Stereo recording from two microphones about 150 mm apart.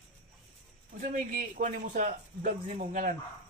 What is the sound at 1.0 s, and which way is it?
Speech, 70° right (ahead or behind).